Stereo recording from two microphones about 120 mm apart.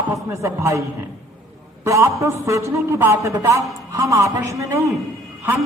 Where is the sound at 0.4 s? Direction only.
25° right (ahead or behind).